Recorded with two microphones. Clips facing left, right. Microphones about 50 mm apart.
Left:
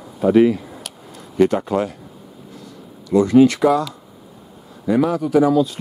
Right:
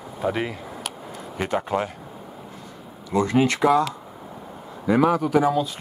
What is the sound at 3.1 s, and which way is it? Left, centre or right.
Speech, right.